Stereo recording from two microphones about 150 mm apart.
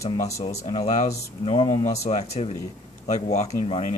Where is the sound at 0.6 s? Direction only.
50° left (ahead or behind).